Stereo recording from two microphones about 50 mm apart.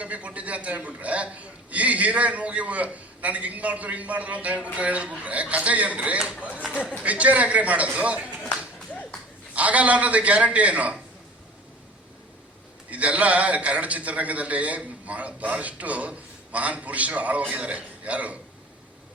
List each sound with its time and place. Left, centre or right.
0.0 s a man's voice: right
9.6 s a man's voice: right
12.9 s a man's voice: right